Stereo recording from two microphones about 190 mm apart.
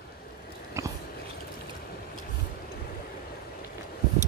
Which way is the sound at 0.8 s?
15° right (ahead or behind).